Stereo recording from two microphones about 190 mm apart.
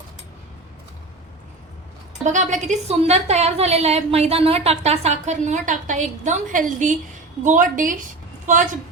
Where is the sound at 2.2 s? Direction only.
40° right (ahead or behind).